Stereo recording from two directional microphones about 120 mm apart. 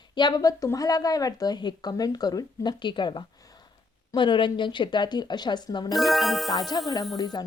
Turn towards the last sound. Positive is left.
turn(degrees=35)  # may be behind; listen again after turning